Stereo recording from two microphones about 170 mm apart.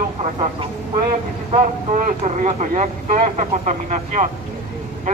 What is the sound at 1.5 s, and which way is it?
Speech, 45° right (ahead or behind).